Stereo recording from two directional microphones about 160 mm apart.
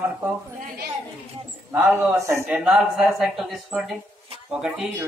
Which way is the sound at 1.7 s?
10° right (ahead or behind).